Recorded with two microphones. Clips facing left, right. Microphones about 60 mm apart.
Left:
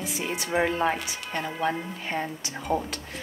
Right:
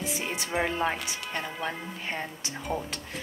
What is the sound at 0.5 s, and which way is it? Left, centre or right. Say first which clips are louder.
Speech: left 4 dB; centre.